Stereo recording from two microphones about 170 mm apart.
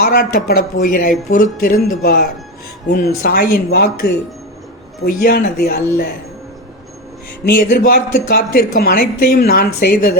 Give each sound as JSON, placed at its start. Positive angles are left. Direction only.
{"t": 0.0, "sound": "speech", "side_deg": 60}
{"t": 7.4, "sound": "speech", "side_deg": 60}